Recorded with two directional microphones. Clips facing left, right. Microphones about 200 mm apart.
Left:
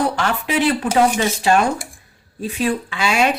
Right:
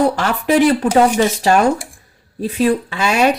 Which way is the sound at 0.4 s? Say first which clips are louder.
Right 8 dB; 40° right (ahead or behind).